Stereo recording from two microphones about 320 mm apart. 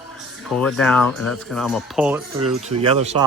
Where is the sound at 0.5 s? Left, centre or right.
Centre.